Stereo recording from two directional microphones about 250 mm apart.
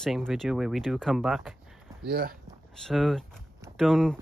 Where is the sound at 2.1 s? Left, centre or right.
Right.